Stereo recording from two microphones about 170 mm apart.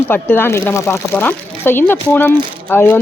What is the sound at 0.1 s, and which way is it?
Speech, 10° left (ahead or behind).